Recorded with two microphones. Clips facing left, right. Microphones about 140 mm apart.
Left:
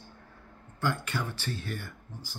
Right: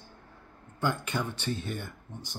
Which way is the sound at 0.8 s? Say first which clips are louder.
Right 1 dB; 20° right (ahead or behind).